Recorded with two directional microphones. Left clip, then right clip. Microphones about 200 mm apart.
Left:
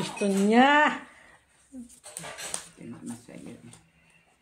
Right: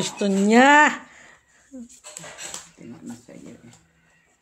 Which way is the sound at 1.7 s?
55° right (ahead or behind).